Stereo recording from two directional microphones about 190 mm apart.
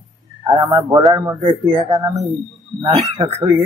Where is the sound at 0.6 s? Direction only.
20° right (ahead or behind).